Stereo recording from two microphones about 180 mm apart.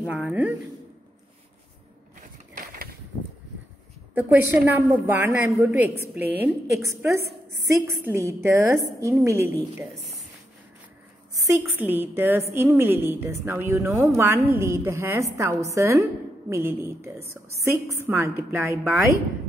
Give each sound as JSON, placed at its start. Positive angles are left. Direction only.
{"t": 0.0, "sound": "a woman's voice", "side_deg": -5}
{"t": 4.1, "sound": "a woman's voice", "side_deg": -10}
{"t": 11.9, "sound": "a woman's voice", "side_deg": -10}